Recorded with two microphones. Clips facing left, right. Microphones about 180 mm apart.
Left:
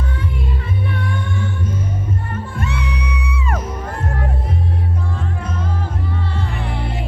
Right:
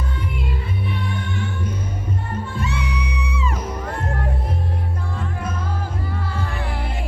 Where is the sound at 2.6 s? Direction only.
60° left (ahead or behind).